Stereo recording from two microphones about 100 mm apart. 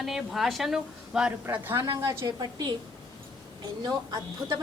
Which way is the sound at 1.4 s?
25° right (ahead or behind).